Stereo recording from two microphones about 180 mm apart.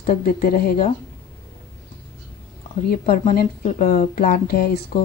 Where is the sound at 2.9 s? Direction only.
55° left (ahead or behind).